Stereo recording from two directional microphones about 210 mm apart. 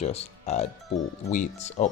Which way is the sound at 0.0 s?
30° left (ahead or behind).